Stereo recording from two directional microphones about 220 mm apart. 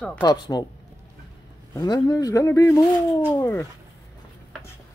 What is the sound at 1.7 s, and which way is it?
Speech, 15° left (ahead or behind).